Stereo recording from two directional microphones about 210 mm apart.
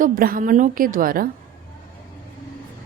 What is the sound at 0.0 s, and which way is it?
A woman's voice, 40° right (ahead or behind).